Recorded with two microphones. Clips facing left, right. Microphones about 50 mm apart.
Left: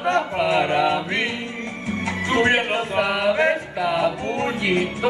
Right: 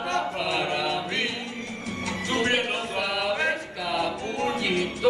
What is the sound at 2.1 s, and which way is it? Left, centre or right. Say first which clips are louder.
Music: left 6 dB; left.